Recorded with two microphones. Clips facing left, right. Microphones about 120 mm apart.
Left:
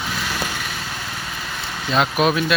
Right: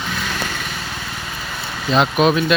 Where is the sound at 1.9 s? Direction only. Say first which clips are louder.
Right 3 dB; centre (ahead or behind).